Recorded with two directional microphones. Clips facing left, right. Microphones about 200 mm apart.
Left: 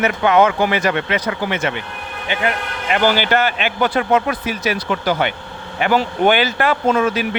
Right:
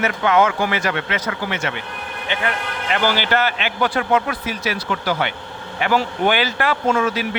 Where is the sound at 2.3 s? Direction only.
15° left (ahead or behind).